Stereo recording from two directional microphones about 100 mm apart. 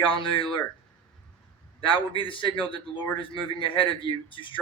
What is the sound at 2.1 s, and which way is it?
Speech, 55° left (ahead or behind).